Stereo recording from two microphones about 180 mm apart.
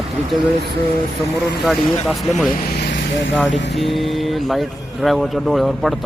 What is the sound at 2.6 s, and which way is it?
Speech, 60° left (ahead or behind).